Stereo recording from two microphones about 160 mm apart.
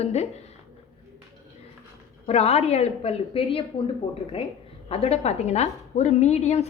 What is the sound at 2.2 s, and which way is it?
A woman's voice, 40° left (ahead or behind).